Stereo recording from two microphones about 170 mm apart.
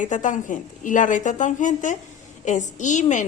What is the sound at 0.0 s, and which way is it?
A woman's voice, 50° left (ahead or behind).